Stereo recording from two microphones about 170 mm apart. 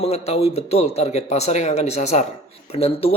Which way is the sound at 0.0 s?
35° left (ahead or behind).